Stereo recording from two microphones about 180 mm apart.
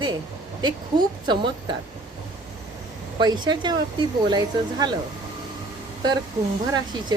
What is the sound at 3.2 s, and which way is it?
Speech, 25° right (ahead or behind).